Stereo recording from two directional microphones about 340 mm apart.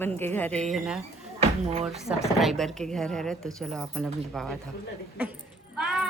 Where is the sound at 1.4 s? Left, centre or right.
Centre.